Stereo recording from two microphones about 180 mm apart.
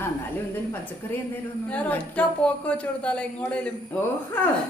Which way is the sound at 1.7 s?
10° left (ahead or behind).